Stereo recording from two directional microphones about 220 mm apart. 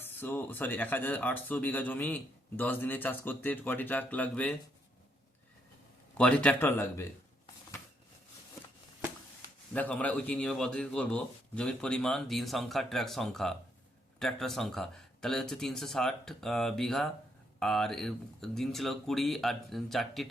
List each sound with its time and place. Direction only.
0.0 s speech: 10° left (ahead or behind)
6.1 s speech: 5° left (ahead or behind)
9.7 s a man's voice: 5° left (ahead or behind)